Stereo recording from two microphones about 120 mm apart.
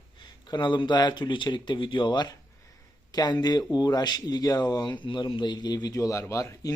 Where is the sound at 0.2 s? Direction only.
40° left (ahead or behind).